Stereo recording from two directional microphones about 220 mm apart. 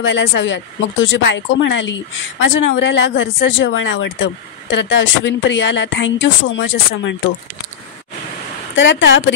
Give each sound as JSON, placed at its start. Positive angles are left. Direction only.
{"t": 0.0, "sound": "speech", "side_deg": 55}
{"t": 8.7, "sound": "speech", "side_deg": 55}